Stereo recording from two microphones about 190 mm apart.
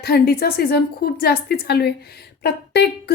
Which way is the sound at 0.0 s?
55° left (ahead or behind).